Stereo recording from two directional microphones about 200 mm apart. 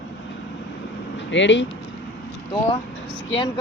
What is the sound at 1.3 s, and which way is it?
Speech, 65° left (ahead or behind).